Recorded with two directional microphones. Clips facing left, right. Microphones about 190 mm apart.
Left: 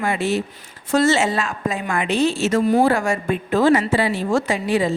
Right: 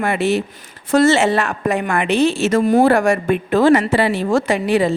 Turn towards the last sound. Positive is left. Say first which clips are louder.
# right 4 dB
turn(degrees=-65)  # may be behind; listen again after turning